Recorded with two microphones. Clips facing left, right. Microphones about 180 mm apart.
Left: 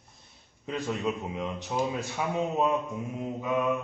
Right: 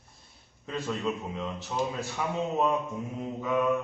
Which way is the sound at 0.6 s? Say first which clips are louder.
Left 1 dB; 15° left (ahead or behind).